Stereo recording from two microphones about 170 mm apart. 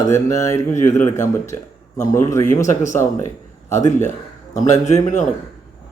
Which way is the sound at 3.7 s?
45° left (ahead or behind).